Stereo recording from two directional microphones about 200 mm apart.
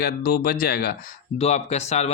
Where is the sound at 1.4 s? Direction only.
35° left (ahead or behind).